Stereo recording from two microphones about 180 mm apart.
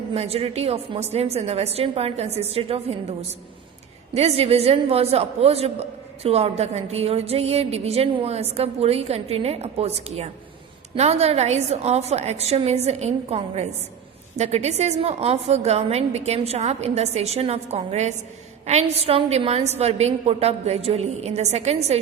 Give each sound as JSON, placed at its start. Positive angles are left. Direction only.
{"t": 0.1, "sound": "a woman's voice", "side_deg": -35}